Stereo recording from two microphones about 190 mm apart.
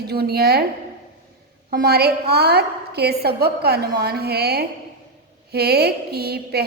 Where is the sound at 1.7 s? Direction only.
55° right (ahead or behind).